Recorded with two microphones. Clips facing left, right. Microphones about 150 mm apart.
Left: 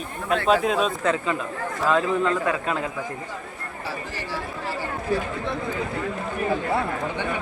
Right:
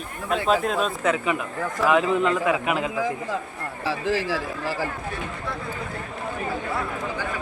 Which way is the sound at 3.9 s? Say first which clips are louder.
Right 8 dB; 90° right.